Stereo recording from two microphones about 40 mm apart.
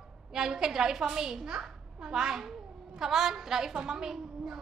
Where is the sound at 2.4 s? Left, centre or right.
Centre.